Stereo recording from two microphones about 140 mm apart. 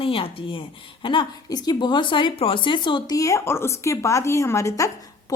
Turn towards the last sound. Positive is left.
turn(degrees=25)  # may be behind; listen again after turning